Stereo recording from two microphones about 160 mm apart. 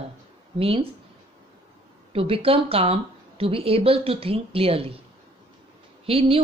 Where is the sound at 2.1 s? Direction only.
35° right (ahead or behind).